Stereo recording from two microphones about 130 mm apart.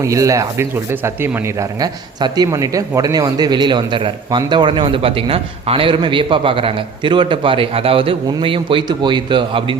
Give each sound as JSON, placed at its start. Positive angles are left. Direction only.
{"t": 0.0, "sound": "a man's voice", "side_deg": -25}